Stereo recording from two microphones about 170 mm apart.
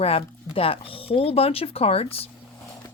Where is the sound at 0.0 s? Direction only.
35° left (ahead or behind).